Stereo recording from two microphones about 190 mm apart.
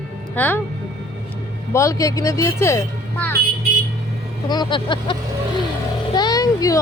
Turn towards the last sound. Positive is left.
turn(degrees=20)  # may be behind; listen again after turning